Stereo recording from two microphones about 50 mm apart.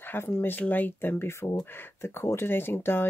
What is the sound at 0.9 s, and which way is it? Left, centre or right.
Speech, left.